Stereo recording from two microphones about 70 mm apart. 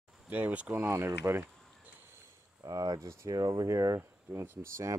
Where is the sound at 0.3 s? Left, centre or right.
Right.